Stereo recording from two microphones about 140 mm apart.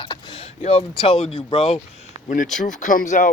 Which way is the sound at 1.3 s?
40° left (ahead or behind).